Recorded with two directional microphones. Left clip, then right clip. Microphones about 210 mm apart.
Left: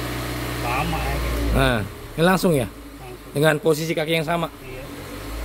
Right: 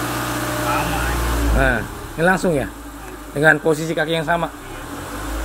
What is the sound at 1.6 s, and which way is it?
A man's voice, 50° left (ahead or behind).